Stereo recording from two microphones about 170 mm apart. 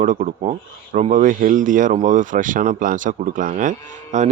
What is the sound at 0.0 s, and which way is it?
Speech, 50° right (ahead or behind).